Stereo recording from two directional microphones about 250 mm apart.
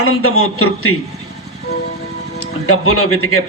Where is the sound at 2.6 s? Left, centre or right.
Left.